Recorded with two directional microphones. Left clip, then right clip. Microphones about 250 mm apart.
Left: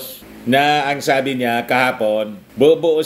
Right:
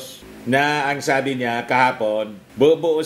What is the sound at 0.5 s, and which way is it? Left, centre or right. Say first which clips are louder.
Speech: left 4 dB; centre.